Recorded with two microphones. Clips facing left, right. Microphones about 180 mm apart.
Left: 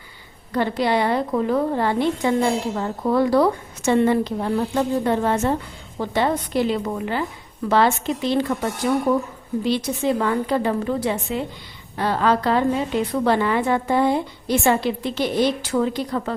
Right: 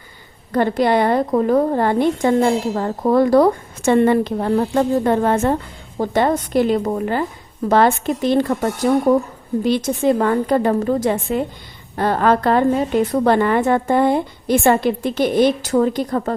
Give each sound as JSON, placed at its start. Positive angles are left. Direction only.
{"t": 0.5, "sound": "a woman's voice", "side_deg": -50}